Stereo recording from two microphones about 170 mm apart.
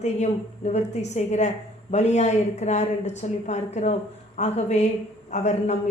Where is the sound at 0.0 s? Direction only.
40° left (ahead or behind).